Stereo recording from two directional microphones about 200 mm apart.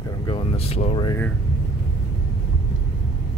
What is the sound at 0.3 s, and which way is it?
Speech, 30° left (ahead or behind).